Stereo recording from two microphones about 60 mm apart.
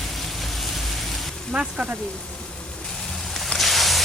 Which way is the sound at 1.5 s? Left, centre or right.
Centre.